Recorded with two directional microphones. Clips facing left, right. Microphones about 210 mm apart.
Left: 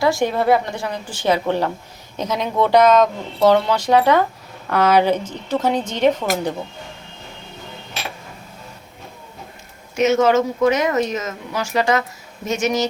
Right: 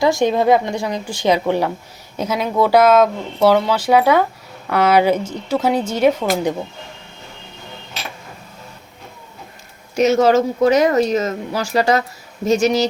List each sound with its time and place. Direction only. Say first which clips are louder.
0.0 s speech: right 3 dB; 20° right (ahead or behind)
9.9 s speech: right 2 dB; 35° right (ahead or behind)